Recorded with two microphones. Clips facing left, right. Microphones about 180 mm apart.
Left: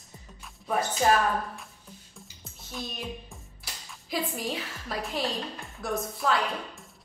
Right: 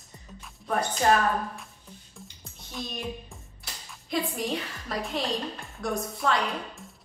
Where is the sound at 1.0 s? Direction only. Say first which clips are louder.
Right 1 dB; 5° left (ahead or behind).